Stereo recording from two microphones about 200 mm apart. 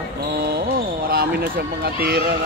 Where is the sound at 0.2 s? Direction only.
50° right (ahead or behind).